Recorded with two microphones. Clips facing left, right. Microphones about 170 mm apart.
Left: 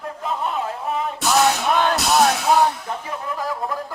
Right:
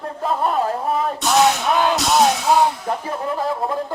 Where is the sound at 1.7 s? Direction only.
5° right (ahead or behind).